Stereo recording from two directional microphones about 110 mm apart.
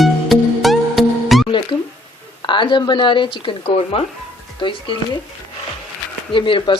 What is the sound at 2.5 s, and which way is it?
A woman's voice, 45° left (ahead or behind).